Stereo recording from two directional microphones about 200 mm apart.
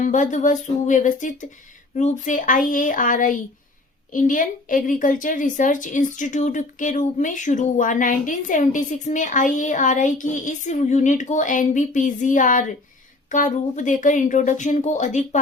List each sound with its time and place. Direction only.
0.0 s a woman's voice: 40° left (ahead or behind)